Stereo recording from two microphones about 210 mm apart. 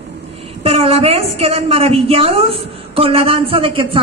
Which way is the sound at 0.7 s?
30° right (ahead or behind).